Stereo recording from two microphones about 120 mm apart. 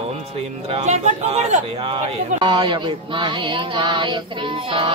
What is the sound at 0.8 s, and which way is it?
Speech, 70° right (ahead or behind).